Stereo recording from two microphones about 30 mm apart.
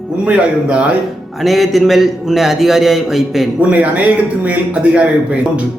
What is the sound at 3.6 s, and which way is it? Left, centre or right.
A man's voice, right.